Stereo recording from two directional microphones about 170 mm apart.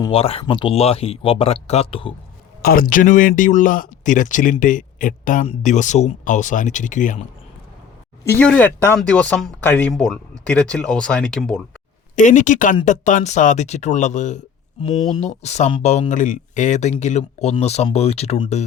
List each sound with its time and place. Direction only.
0.1 s speech: 35° left (ahead or behind)
2.6 s speech: 60° left (ahead or behind)
8.2 s speech: 15° left (ahead or behind)
12.1 s speech: 45° left (ahead or behind)
14.8 s speech: 35° left (ahead or behind)